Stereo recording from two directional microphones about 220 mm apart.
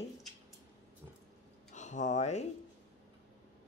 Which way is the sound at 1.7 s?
35° left (ahead or behind).